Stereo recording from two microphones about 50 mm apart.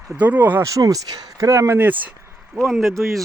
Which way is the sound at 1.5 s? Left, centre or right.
Right.